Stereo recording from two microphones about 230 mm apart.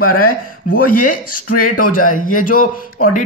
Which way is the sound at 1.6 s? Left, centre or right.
Left.